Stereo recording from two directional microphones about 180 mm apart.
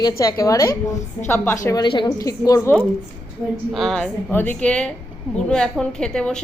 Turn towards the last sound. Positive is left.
turn(degrees=5)  # may be behind; listen again after turning